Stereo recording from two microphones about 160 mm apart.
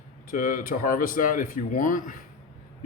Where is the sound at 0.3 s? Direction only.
60° left (ahead or behind).